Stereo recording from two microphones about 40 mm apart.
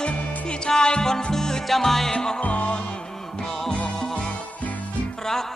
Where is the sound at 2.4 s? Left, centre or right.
Left.